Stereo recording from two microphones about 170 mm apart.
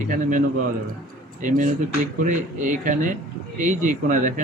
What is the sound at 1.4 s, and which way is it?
A man's voice, 50° right (ahead or behind).